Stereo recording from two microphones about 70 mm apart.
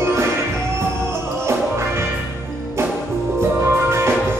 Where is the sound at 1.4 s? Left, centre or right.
Right.